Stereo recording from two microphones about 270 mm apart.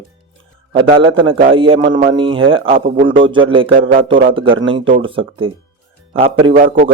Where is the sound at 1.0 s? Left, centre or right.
Centre.